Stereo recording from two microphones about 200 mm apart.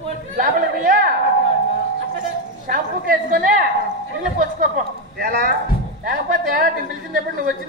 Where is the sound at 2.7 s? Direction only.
45° right (ahead or behind).